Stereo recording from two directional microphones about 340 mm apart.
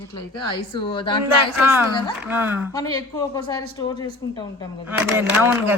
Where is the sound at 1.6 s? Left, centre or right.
Centre.